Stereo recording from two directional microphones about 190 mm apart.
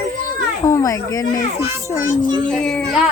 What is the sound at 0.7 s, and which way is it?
Speech, 15° left (ahead or behind).